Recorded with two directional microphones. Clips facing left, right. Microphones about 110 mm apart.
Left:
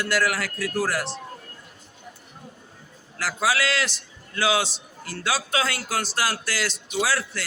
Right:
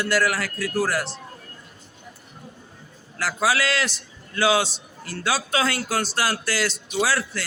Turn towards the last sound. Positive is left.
turn(degrees=-40)  # may be behind; listen again after turning